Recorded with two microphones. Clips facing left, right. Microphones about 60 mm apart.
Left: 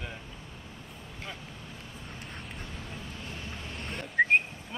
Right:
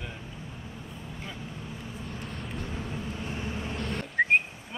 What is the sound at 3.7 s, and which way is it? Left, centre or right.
Whistling, right.